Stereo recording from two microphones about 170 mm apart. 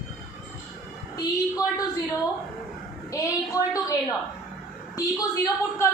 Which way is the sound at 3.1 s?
20° left (ahead or behind).